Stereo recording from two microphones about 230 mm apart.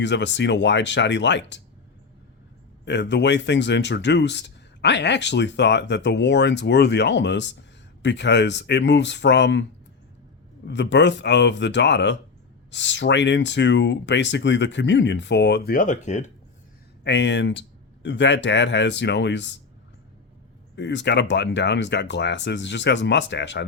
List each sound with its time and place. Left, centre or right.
0.0 s speech: left
2.8 s speech: left
10.7 s speech: left
17.0 s speech: left
20.7 s speech: left